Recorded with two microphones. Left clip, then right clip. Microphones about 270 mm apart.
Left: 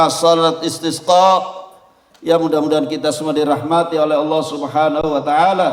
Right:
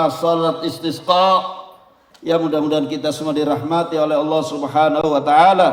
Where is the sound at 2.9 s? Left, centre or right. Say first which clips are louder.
Left 3 dB; left.